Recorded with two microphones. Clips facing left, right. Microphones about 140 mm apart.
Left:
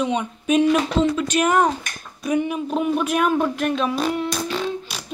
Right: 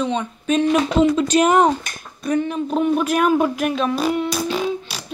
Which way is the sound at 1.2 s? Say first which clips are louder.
Right 4 dB; 25° right (ahead or behind).